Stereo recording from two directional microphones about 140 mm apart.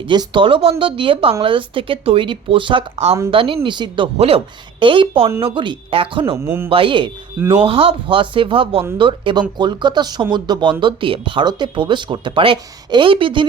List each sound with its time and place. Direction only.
0.0 s speech: 35° right (ahead or behind)
6.3 s speech: 15° right (ahead or behind)
6.7 s speech: 40° right (ahead or behind)